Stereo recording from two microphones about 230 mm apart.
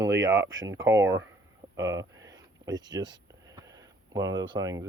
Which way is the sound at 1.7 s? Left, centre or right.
Centre.